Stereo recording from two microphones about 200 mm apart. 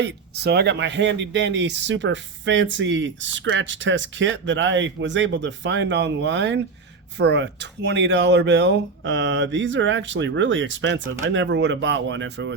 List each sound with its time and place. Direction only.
0.0 s speech: 55° right (ahead or behind)